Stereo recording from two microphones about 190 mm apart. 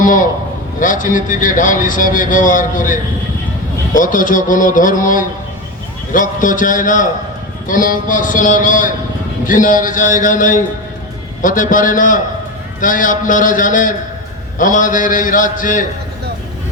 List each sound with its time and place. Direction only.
0.0 s a man's voice: 45° left (ahead or behind)